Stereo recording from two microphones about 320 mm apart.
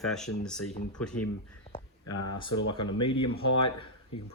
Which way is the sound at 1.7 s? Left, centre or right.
Centre.